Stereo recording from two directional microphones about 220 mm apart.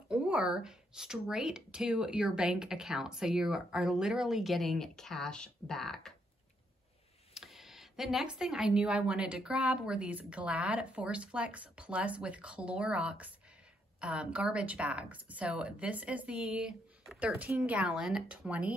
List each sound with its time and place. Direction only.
0.1 s speech: 5° right (ahead or behind)
7.3 s speech: centre (ahead or behind)